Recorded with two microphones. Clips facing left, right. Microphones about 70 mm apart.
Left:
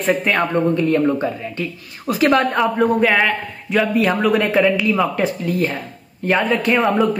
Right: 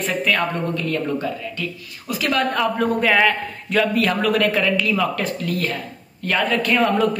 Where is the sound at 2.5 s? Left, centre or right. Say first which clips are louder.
Left 4 dB; centre.